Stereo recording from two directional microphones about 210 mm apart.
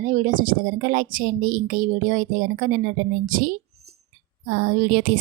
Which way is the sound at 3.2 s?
40° right (ahead or behind).